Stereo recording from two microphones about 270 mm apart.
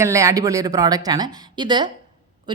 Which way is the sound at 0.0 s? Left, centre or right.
Centre.